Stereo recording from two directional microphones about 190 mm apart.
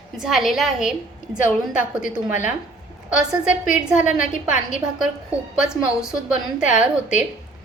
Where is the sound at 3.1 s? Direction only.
5° right (ahead or behind).